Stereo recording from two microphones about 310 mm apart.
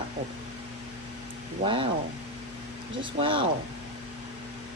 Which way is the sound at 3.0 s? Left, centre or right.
Centre.